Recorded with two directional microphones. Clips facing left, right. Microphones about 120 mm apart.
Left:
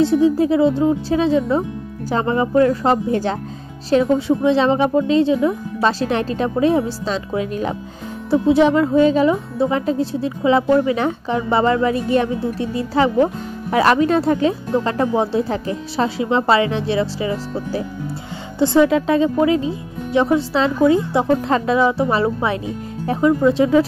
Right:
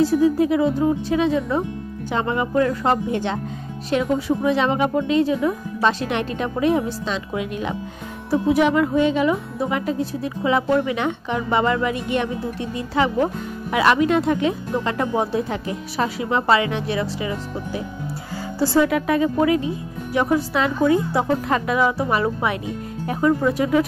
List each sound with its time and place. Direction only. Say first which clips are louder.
0.0 s speech: left 2 dB; 25° left (ahead or behind)